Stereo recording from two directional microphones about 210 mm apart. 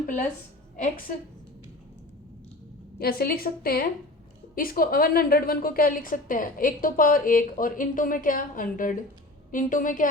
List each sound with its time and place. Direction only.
0.8 s a woman's voice: 40° left (ahead or behind)
3.0 s a woman's voice: 45° left (ahead or behind)